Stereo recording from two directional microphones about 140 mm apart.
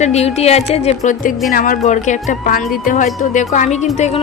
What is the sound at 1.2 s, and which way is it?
Speech, 85° left.